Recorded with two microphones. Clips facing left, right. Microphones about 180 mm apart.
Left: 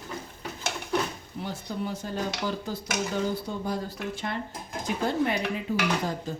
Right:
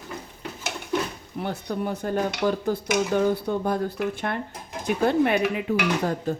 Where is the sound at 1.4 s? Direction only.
60° right (ahead or behind).